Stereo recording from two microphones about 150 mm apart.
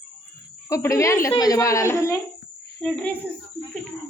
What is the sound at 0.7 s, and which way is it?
A woman's voice, 20° left (ahead or behind).